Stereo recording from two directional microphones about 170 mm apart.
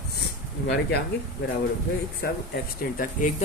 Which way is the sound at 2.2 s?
60° left (ahead or behind).